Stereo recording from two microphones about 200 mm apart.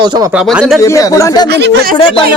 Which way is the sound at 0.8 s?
15° left (ahead or behind).